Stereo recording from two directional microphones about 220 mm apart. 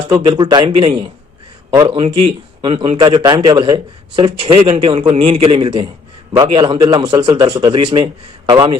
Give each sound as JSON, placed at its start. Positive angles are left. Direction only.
{"t": 0.1, "sound": "a man's voice", "side_deg": -20}